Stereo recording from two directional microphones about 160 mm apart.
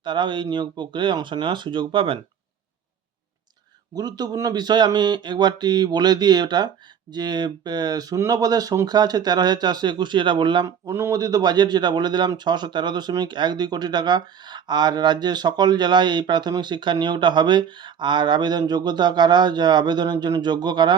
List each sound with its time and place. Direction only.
0.0 s a man's voice: 30° right (ahead or behind)
3.9 s a man's voice: 25° right (ahead or behind)